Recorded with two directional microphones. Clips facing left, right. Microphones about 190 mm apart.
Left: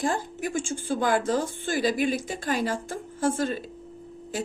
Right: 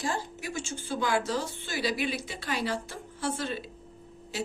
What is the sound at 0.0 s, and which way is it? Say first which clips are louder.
A woman's voice: left 5 dB; 50° left (ahead or behind).